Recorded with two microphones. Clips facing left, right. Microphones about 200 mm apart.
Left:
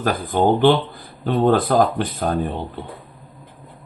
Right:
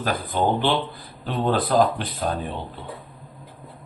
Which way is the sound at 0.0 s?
50° left (ahead or behind).